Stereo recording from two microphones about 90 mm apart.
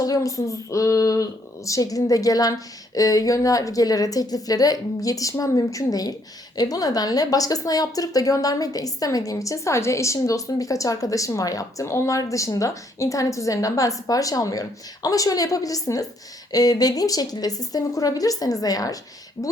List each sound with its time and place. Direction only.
0.0 s a woman's voice: 40° left (ahead or behind)